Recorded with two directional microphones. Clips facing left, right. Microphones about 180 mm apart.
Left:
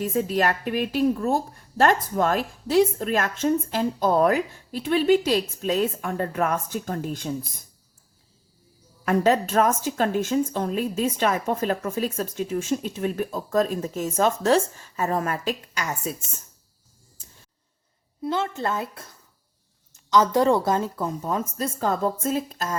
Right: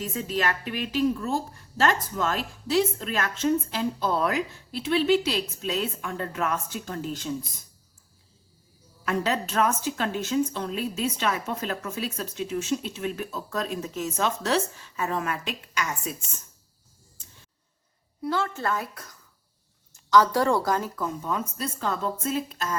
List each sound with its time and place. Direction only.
0.1 s a woman's voice: 40° left (ahead or behind)
9.0 s a woman's voice: 45° left (ahead or behind)
18.2 s a woman's voice: 20° left (ahead or behind); by 22.7 s 40° left (ahead or behind)